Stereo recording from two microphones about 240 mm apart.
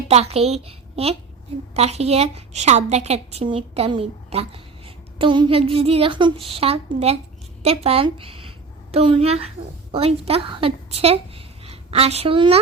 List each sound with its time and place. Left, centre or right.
0.1 s a woman's voice: right